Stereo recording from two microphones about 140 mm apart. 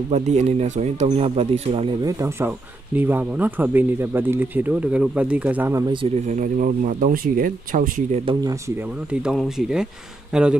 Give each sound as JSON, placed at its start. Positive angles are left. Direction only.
{"t": 0.1, "sound": "speech", "side_deg": -50}
{"t": 2.0, "sound": "speech", "side_deg": -20}
{"t": 6.2, "sound": "speech", "side_deg": -65}
{"t": 8.5, "sound": "speech", "side_deg": -20}
{"t": 9.1, "sound": "speech", "side_deg": -5}